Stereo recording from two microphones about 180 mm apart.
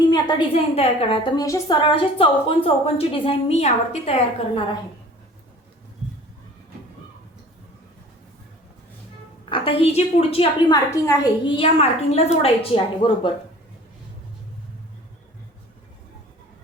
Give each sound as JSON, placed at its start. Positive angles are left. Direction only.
{"t": 0.1, "sound": "a woman's voice", "side_deg": 25}
{"t": 9.5, "sound": "a woman's voice", "side_deg": 30}